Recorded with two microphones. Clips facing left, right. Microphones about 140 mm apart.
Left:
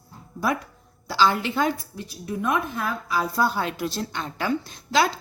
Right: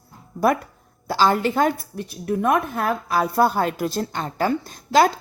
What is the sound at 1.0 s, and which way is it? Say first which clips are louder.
A woman's voice: right 3 dB; 50° right (ahead or behind).